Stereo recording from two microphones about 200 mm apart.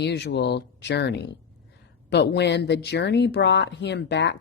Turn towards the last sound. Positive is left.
turn(degrees=60)  # may be behind; listen again after turning